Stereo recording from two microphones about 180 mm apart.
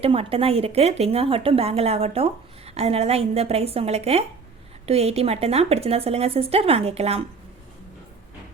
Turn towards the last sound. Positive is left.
turn(degrees=-35)  # may be behind; listen again after turning